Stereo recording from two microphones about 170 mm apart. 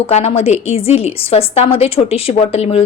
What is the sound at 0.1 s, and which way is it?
A woman's voice, 35° left (ahead or behind).